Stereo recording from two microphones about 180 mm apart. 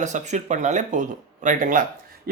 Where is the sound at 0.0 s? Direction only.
40° right (ahead or behind).